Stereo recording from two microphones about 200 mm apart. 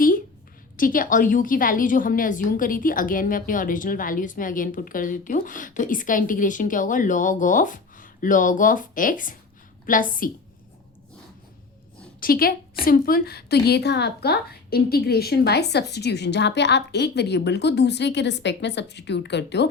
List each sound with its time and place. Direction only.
0.8 s a woman's voice: 45° left (ahead or behind)
12.2 s a woman's voice: 45° left (ahead or behind)